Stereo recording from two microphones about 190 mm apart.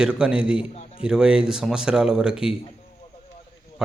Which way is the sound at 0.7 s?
35° left (ahead or behind).